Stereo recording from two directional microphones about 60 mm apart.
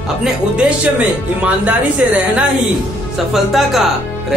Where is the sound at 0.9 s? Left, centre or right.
Right.